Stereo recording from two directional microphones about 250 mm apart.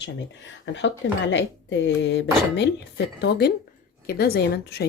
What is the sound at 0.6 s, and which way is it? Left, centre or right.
Speech, left.